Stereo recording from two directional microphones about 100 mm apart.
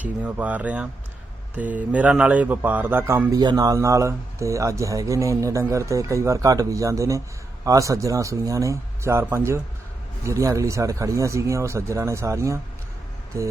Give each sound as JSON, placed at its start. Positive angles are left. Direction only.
{"t": 0.0, "sound": "speech", "side_deg": -15}
{"t": 3.3, "sound": "speech", "side_deg": -40}